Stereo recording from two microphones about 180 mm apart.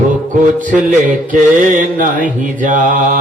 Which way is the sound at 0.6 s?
45° right (ahead or behind).